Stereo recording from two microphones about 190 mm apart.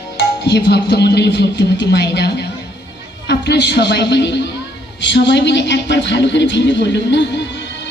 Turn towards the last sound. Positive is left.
turn(degrees=65)  # may be behind; listen again after turning